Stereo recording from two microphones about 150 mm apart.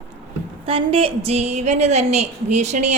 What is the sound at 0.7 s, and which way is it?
A woman's voice, 40° right (ahead or behind).